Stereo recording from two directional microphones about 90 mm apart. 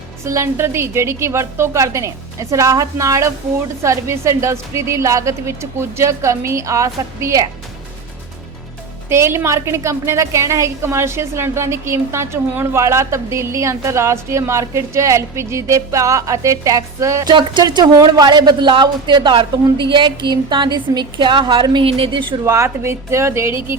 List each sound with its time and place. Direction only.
0.3 s a woman's voice: 30° right (ahead or behind)
9.0 s a woman's voice: 30° right (ahead or behind)
17.2 s speech: 55° right (ahead or behind)
22.4 s a woman's voice: 35° right (ahead or behind)